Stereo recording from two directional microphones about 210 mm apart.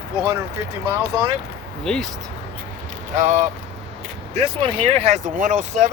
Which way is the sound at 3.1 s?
35° right (ahead or behind).